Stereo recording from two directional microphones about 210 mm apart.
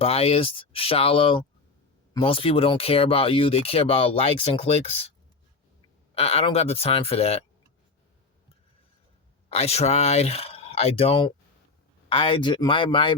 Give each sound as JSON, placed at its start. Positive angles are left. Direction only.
{"t": 0.0, "sound": "speech", "side_deg": 25}
{"t": 6.1, "sound": "speech", "side_deg": 30}
{"t": 9.5, "sound": "speech", "side_deg": 30}